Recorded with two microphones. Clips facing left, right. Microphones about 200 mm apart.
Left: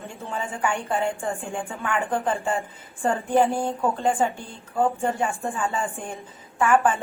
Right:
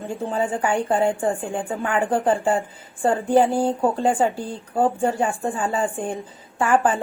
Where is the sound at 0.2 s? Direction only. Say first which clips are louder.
Right 5 dB; 35° right (ahead or behind).